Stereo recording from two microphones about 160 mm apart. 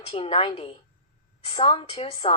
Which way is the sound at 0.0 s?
35° left (ahead or behind).